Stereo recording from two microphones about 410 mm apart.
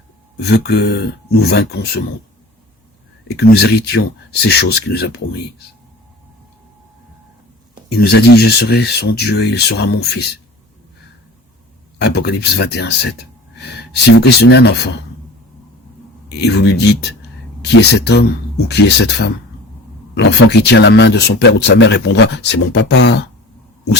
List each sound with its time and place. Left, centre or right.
0.3 s speech: left
3.2 s speech: left
8.1 s speech: left
11.9 s speech: left
16.4 s speech: left